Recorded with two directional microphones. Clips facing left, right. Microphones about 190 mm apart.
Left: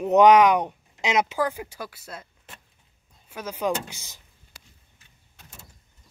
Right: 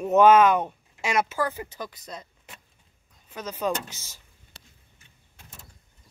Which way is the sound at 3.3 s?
10° left (ahead or behind).